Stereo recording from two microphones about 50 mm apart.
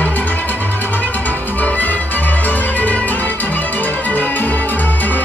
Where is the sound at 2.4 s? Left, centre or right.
Left.